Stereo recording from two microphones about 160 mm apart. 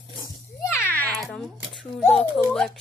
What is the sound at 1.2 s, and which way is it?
A child's voice, centre (ahead or behind).